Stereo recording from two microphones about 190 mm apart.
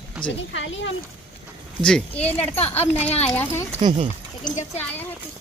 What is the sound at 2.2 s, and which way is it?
Speech, 30° left (ahead or behind).